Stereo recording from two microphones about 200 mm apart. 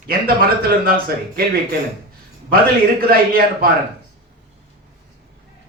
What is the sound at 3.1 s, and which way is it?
Speech, 50° right (ahead or behind).